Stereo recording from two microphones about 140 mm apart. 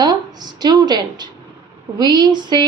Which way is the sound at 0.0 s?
30° right (ahead or behind).